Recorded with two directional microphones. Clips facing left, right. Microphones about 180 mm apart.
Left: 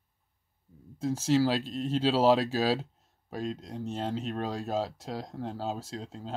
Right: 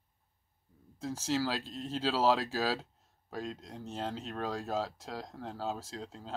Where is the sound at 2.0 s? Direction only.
25° left (ahead or behind).